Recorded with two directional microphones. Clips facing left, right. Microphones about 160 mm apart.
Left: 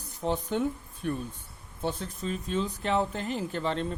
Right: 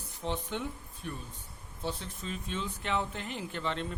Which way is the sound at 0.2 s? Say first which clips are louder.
Left 7 dB; 40° left (ahead or behind).